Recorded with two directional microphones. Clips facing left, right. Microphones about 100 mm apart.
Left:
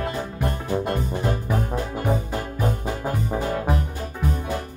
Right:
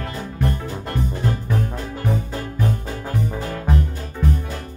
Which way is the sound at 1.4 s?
15° left (ahead or behind).